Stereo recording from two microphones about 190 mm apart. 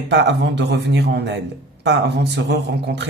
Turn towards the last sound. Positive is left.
turn(degrees=-60)  # may be behind; listen again after turning